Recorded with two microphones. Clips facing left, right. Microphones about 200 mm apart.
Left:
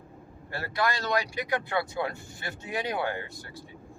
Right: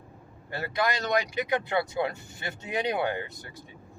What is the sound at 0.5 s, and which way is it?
Speech, 20° right (ahead or behind).